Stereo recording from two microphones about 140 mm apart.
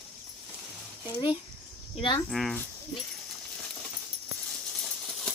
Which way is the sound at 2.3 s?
Centre (ahead or behind).